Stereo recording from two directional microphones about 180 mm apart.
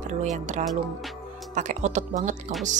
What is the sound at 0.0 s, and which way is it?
Speech, 40° right (ahead or behind).